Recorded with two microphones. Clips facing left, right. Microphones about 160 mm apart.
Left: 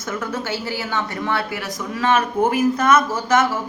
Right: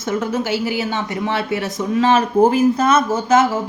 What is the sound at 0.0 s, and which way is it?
A woman's voice, 25° right (ahead or behind).